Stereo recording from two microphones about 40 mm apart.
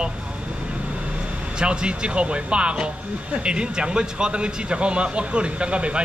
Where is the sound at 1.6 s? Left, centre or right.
Right.